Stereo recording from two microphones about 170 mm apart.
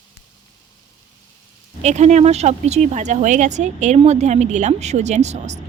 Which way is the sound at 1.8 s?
40° right (ahead or behind).